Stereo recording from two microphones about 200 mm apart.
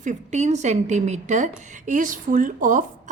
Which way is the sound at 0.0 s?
35° right (ahead or behind).